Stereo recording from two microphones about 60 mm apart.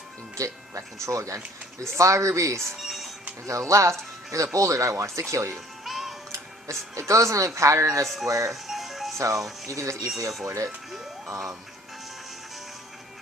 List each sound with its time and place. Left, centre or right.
0.3 s speech: right
2.7 s music: centre
3.4 s speech: right
5.8 s music: centre
6.3 s speech: right
8.0 s speech: centre
8.3 s speech: right
8.6 s music: centre
9.1 s speech: right